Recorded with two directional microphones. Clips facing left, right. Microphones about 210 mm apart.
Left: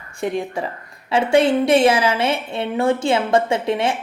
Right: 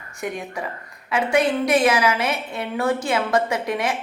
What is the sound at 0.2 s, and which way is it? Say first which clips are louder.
Speech: left 6 dB; 30° left (ahead or behind).